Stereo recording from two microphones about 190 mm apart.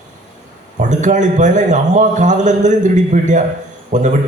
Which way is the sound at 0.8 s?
40° right (ahead or behind).